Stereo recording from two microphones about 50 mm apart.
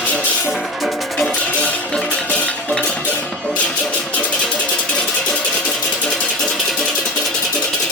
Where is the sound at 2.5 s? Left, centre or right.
Left.